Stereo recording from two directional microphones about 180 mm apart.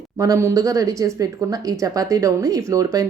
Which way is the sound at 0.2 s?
15° right (ahead or behind).